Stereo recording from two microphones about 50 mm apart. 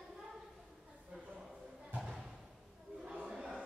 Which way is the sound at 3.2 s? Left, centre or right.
Centre.